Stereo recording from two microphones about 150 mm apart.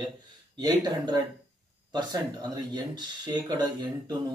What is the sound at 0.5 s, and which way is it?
Speech, 25° right (ahead or behind).